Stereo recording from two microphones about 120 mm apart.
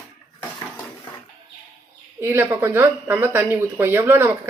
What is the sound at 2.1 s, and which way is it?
Speech, 20° right (ahead or behind).